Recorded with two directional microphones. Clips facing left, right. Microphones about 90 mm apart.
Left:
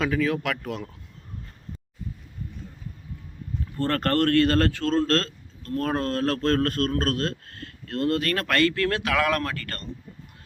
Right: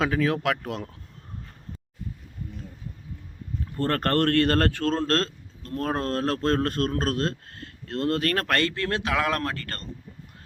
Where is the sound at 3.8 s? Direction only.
35° right (ahead or behind).